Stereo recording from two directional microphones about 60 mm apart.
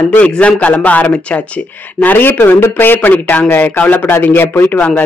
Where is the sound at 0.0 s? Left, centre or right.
Left.